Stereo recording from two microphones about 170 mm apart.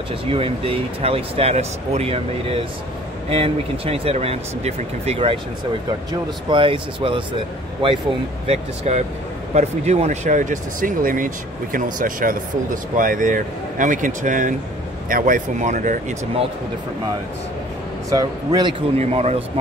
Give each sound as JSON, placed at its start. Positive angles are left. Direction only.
{"t": 0.3, "sound": "speech", "side_deg": -35}
{"t": 6.5, "sound": "speech", "side_deg": -30}
{"t": 8.5, "sound": "speech", "side_deg": -40}
{"t": 18.1, "sound": "speech", "side_deg": -25}
{"t": 18.9, "sound": "speech", "side_deg": -40}